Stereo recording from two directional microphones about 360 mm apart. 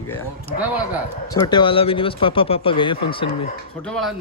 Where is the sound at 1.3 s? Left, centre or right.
Centre.